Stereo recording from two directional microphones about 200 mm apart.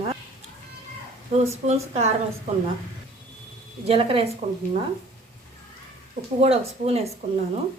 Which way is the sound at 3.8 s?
30° right (ahead or behind).